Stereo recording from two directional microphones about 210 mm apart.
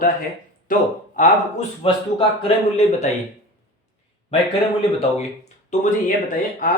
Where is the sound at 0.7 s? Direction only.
40° left (ahead or behind).